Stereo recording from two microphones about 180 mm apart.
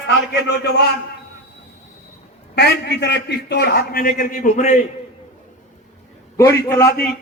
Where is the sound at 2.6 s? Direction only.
65° left (ahead or behind); by 4.9 s 45° left (ahead or behind).